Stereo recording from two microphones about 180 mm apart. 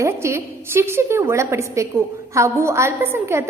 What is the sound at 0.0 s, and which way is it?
A woman's voice, 15° right (ahead or behind).